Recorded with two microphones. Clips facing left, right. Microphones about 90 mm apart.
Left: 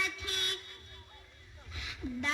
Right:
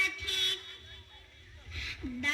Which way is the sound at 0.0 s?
20° left (ahead or behind).